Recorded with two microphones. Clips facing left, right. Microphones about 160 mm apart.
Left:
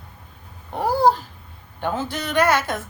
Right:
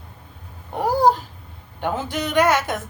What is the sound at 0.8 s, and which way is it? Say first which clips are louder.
A woman's voice: even; 15° right (ahead or behind).